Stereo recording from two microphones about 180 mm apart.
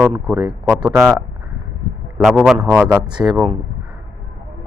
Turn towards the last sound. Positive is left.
turn(degrees=-25)  # may be behind; listen again after turning